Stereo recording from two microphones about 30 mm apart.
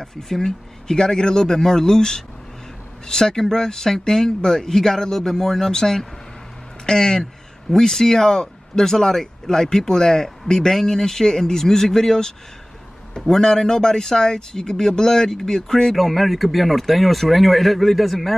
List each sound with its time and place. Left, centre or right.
0.0 s speech: centre
16.0 s speech: centre